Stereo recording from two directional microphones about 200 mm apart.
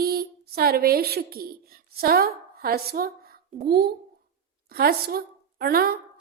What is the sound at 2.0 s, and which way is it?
A woman's voice, 50° right (ahead or behind).